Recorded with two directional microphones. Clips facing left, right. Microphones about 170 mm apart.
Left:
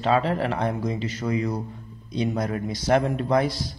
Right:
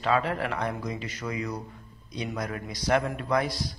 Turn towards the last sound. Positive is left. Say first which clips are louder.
# left 5 dB
turn(degrees=30)  # may be behind; listen again after turning